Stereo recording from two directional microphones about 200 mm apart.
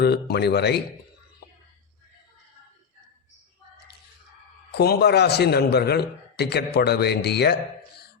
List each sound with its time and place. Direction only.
0.0 s speech: 55° left (ahead or behind)
4.7 s a man's voice: 50° left (ahead or behind)